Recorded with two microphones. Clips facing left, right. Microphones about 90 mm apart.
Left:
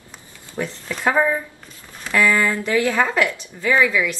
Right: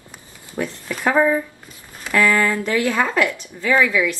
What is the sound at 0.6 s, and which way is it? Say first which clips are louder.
Speech: right 1 dB; 5° left (ahead or behind).